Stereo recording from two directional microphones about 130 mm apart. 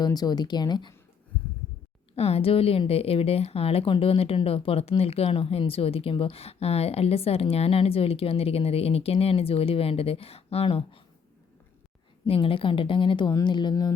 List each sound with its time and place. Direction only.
0.0 s a woman's voice: 30° left (ahead or behind)
2.1 s a woman's voice: 50° left (ahead or behind)
12.3 s a woman's voice: 45° left (ahead or behind)